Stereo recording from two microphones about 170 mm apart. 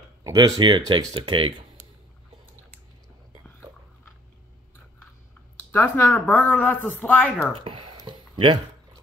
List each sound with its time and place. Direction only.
0.2 s speech: 20° right (ahead or behind)
3.7 s biting: 25° right (ahead or behind)
5.6 s speech: 10° left (ahead or behind)
7.5 s speech: 30° right (ahead or behind)
8.1 s a sound: 25° right (ahead or behind)